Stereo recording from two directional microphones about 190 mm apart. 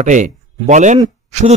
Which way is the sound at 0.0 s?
40° right (ahead or behind).